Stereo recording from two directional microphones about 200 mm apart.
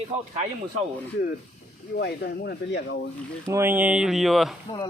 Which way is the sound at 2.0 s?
55° left (ahead or behind).